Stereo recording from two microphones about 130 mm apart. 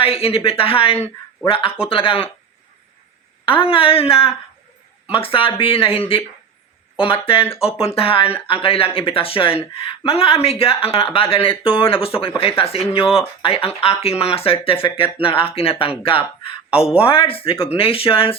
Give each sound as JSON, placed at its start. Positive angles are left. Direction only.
{"t": 0.0, "sound": "speech", "side_deg": 45}
{"t": 3.6, "sound": "speech", "side_deg": 45}